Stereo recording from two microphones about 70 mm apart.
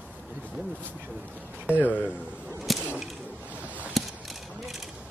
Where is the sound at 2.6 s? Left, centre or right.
Centre.